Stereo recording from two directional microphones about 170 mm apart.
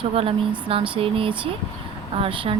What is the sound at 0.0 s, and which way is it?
Speech, 35° right (ahead or behind).